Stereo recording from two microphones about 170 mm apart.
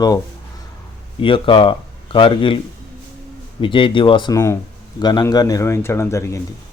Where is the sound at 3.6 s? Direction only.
30° left (ahead or behind).